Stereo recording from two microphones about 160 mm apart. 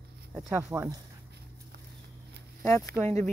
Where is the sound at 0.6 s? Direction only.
20° right (ahead or behind).